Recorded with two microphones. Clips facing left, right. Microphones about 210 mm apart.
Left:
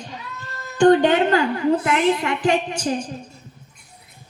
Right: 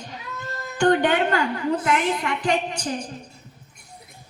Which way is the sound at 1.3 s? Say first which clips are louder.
Left 5 dB; 40° left (ahead or behind).